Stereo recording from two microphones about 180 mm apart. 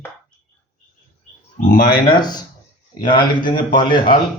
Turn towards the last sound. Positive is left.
turn(degrees=25)  # may be behind; listen again after turning